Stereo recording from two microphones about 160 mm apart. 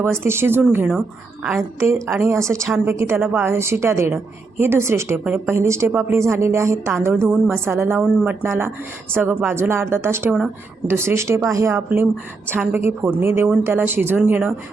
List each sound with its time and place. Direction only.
0.0 s a woman's voice: 15° right (ahead or behind)